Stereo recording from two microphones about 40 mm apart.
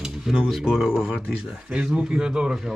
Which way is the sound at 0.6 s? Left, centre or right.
Centre.